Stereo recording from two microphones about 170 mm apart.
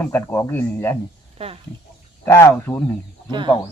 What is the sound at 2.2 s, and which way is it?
Speech, 15° left (ahead or behind).